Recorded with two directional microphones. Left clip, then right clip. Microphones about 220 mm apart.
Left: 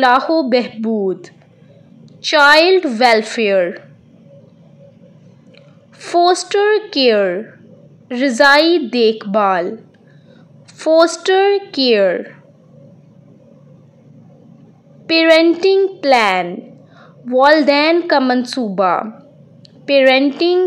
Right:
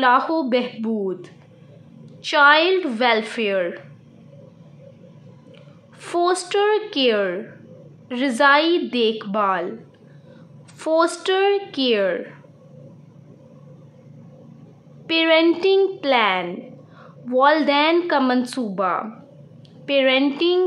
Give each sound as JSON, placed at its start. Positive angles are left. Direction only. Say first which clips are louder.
{"t": 0.0, "sound": "a woman's voice", "louder": "left 5 dB", "side_deg": 20}
{"t": 5.9, "sound": "a woman's voice", "louder": "left 8 dB", "side_deg": 15}
{"t": 10.8, "sound": "a woman's voice", "louder": "left 7 dB", "side_deg": 15}
{"t": 15.0, "sound": "a woman's voice", "louder": "left 6 dB", "side_deg": 20}